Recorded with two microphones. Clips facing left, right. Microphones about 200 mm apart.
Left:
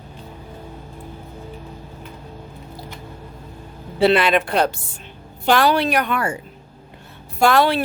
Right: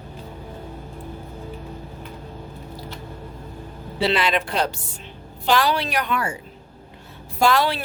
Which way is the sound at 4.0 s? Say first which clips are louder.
Left 6 dB; 55° left (ahead or behind).